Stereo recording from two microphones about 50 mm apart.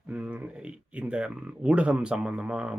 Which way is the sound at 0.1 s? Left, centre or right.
Right.